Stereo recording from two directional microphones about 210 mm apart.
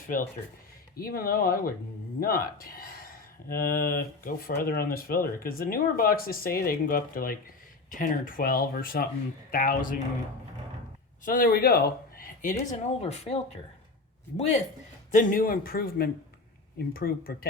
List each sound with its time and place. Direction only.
0.9 s speech: 45° left (ahead or behind)
11.3 s speech: 45° left (ahead or behind)
15.1 s speech: 40° left (ahead or behind)